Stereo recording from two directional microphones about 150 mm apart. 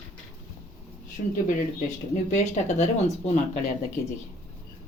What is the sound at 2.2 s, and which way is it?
Speech, 55° left (ahead or behind).